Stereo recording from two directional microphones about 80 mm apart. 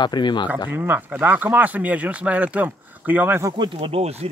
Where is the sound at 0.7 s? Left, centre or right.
Right.